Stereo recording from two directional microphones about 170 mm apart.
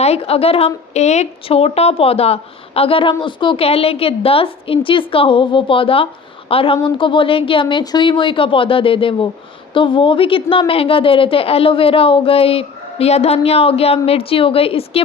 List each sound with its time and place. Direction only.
0.0 s speech: 35° left (ahead or behind)